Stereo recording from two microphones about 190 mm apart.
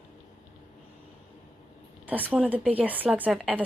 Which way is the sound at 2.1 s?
10° right (ahead or behind).